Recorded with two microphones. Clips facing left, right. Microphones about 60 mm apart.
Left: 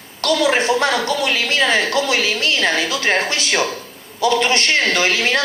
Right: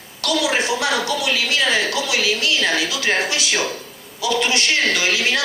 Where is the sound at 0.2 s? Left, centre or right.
Left.